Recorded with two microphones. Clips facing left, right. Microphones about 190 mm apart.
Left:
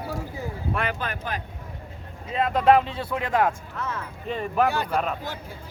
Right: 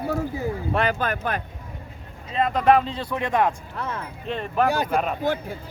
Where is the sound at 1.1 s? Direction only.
60° right (ahead or behind).